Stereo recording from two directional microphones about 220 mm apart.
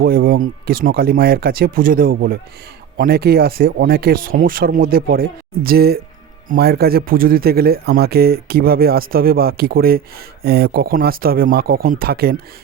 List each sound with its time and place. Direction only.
0.0 s a man's voice: 40° right (ahead or behind)